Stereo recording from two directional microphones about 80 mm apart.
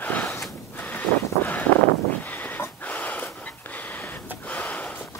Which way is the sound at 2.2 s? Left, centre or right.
Left.